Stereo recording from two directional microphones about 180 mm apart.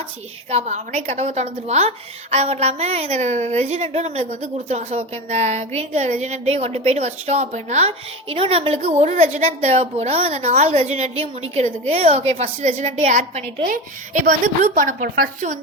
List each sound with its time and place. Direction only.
0.5 s a woman's voice: 40° right (ahead or behind)